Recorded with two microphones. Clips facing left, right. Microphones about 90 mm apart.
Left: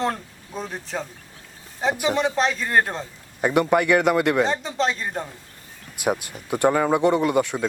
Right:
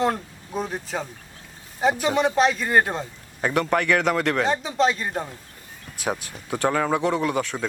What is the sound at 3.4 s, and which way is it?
Speech, 10° left (ahead or behind).